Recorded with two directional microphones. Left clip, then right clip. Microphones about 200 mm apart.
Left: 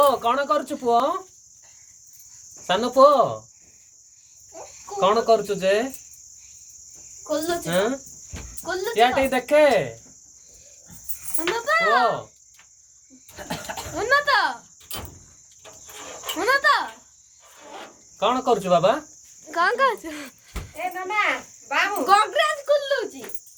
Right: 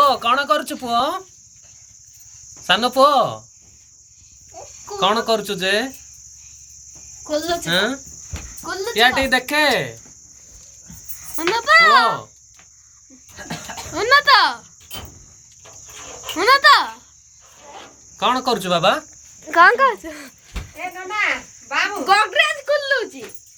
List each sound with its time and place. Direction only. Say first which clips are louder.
0.0 s speech: right 3 dB; 5° right (ahead or behind)
2.6 s speech: right 1 dB; 5° right (ahead or behind)
4.9 s speech: even; 5° right (ahead or behind)
7.3 s speech: right 4 dB; centre (ahead or behind)
11.3 s a child's voice: right 8 dB; 25° right (ahead or behind)
13.9 s a child's voice: right 6 dB; 20° right (ahead or behind)
16.4 s a child's voice: right 7 dB; 25° right (ahead or behind)
18.2 s speech: right 2 dB; 5° right (ahead or behind)
19.5 s a child's voice: right 8 dB; 25° right (ahead or behind)
20.0 s speech: right 1 dB; centre (ahead or behind)
21.7 s speech: right 2 dB; 10° left (ahead or behind)